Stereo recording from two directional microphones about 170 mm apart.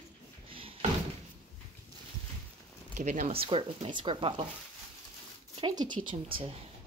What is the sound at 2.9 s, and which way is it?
Speech, 45° right (ahead or behind).